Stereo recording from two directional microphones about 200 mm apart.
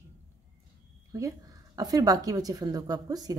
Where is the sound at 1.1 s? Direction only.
15° right (ahead or behind).